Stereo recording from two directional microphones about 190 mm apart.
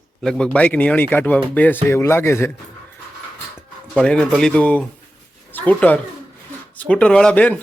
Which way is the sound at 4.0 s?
5° left (ahead or behind).